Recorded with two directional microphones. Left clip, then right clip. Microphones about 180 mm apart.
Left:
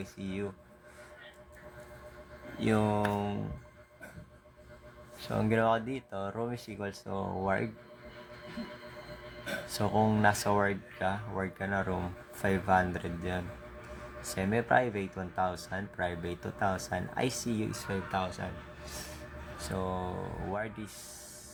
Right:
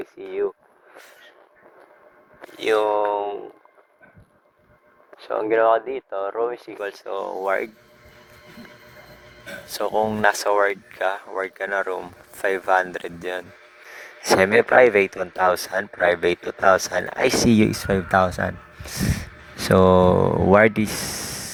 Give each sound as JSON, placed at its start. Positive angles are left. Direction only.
{"t": 2.6, "sound": "speech", "side_deg": -45}
{"t": 3.0, "sound": "speech", "side_deg": -20}
{"t": 5.3, "sound": "speech", "side_deg": -30}
{"t": 9.6, "sound": "speech", "side_deg": -50}
{"t": 14.4, "sound": "speech", "side_deg": -50}